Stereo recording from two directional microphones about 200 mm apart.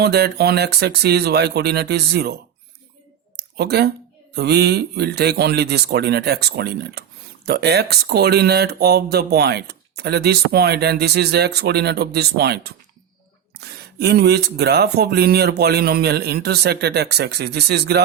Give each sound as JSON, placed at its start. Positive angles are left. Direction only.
{"t": 0.0, "sound": "speech", "side_deg": -55}
{"t": 3.3, "sound": "a sound", "side_deg": -55}
{"t": 4.4, "sound": "speech", "side_deg": -55}